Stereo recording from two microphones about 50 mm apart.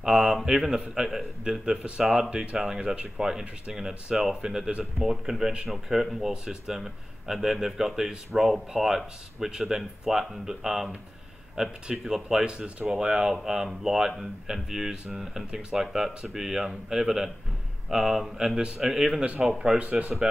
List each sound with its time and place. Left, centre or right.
0.0 s speech: centre
5.7 s speech: centre
18.6 s speech: centre
19.2 s speech: right